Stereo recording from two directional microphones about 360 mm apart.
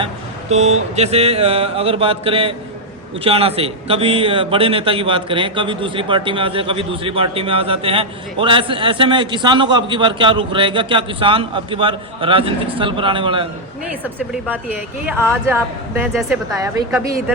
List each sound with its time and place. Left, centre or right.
0.5 s a man's voice: centre